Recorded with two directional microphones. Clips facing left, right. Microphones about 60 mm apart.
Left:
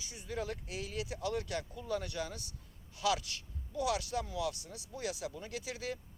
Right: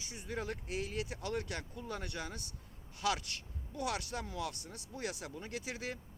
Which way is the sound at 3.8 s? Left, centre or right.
Right.